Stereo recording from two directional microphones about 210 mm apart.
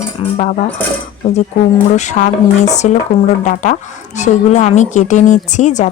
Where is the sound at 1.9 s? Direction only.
35° left (ahead or behind).